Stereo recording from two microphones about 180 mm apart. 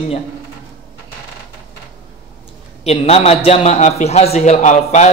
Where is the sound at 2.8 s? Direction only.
35° left (ahead or behind).